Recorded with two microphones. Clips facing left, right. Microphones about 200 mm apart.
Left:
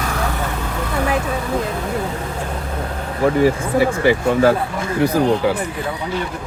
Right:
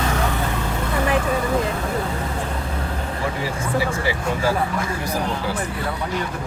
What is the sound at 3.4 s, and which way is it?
Speech, 55° left (ahead or behind).